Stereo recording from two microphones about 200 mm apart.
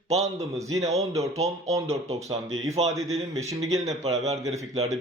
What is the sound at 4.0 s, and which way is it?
Speech, 30° right (ahead or behind).